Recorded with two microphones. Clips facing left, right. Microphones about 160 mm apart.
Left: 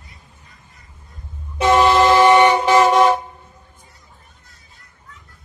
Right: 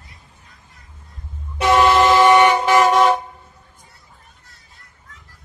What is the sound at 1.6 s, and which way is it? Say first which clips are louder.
Vehicle: left 1 dB; 20° left (ahead or behind).